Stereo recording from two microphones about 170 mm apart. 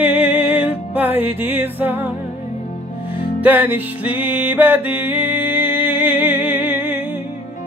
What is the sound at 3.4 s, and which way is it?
Music, 10° right (ahead or behind).